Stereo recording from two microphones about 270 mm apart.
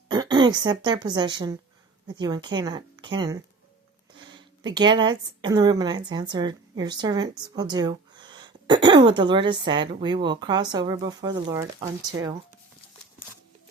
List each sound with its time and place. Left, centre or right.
0.1 s a woman's voice: centre